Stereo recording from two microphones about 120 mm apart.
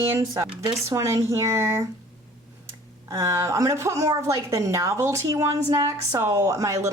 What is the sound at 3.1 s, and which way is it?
A woman's voice, 30° right (ahead or behind).